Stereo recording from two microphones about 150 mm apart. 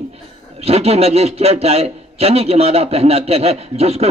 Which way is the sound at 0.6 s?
45° right (ahead or behind).